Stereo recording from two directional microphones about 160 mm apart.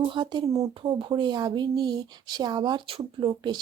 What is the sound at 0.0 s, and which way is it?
Speech, 30° right (ahead or behind).